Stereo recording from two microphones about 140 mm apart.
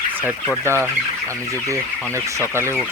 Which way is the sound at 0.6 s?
20° right (ahead or behind).